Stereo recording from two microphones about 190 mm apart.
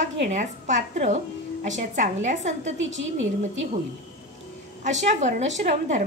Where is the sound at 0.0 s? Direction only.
40° right (ahead or behind).